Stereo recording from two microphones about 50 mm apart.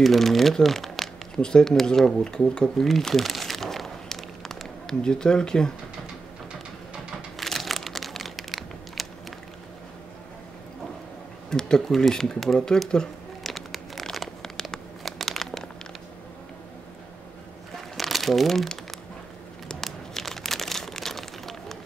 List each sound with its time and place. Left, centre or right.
0.0 s speech: centre
2.9 s crumpling: centre
5.0 s speech: centre
7.3 s crumpling: centre
11.5 s speech: centre
13.4 s a sound: centre
14.1 s crumpling: centre
17.9 s crumpling: centre
19.7 s a sound: centre